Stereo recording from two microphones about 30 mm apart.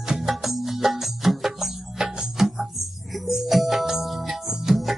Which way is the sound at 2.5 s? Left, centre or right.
Centre.